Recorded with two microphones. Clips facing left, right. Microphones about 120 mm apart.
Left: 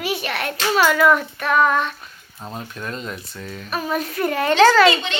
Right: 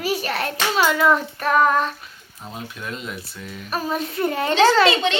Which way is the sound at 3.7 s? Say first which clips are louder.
Left 1 dB; 30° right (ahead or behind).